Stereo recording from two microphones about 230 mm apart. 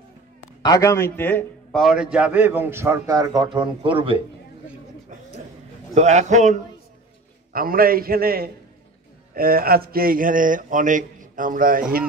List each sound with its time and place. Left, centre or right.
0.6 s a man's voice: centre; by 4.2 s right
5.9 s speech: right
7.5 s speech: right